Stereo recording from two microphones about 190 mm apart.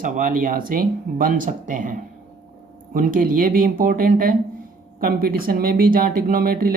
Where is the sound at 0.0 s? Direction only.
45° right (ahead or behind).